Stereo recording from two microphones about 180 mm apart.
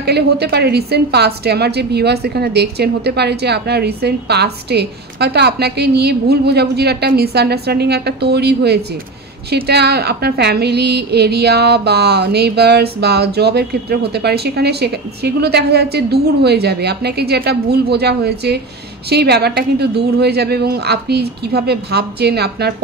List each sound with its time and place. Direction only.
0.0 s a woman's voice: 65° right (ahead or behind)